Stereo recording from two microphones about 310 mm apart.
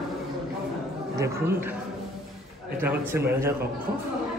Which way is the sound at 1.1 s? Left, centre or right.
Centre.